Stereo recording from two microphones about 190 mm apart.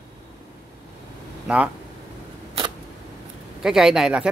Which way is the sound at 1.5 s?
5° right (ahead or behind).